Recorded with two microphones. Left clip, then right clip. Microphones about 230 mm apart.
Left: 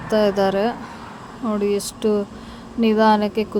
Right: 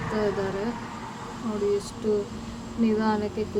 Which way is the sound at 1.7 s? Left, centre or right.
Left.